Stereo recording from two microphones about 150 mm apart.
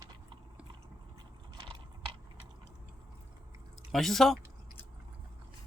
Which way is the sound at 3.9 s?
Centre (ahead or behind).